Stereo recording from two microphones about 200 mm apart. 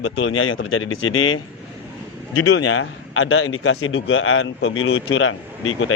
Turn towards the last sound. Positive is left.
turn(degrees=85)